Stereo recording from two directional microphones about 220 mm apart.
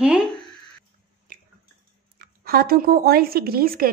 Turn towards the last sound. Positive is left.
turn(degrees=-40)  # may be behind; listen again after turning